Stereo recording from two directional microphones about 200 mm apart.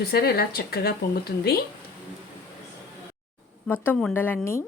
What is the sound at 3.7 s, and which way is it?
Speech, 5° left (ahead or behind).